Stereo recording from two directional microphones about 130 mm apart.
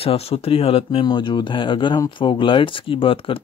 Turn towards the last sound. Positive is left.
turn(degrees=45)  # may be behind; listen again after turning